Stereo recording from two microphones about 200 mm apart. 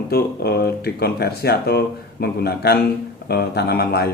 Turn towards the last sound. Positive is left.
turn(degrees=50)  # may be behind; listen again after turning